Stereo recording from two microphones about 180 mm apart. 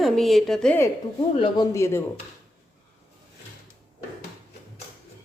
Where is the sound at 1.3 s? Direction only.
25° left (ahead or behind).